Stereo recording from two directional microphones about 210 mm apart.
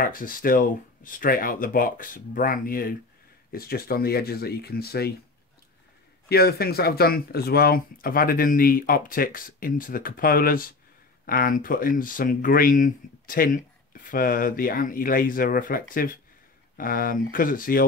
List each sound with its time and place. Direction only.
0.0 s speech: 40° left (ahead or behind)
6.2 s speech: 45° left (ahead or behind)